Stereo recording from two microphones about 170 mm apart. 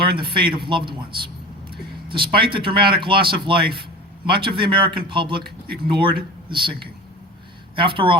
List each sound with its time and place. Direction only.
0.0 s speech: 30° right (ahead or behind)
1.7 s vehicle: 30° right (ahead or behind)
2.3 s speech: 30° right (ahead or behind)
7.8 s speech: 30° right (ahead or behind)